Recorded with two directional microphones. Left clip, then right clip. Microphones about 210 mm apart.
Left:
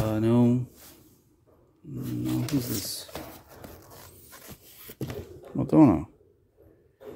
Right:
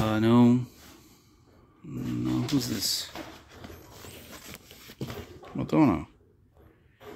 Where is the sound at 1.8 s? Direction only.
10° left (ahead or behind).